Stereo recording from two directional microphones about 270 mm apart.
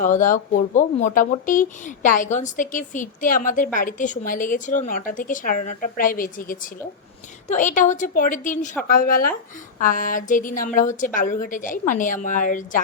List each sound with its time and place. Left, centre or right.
0.0 s speech: left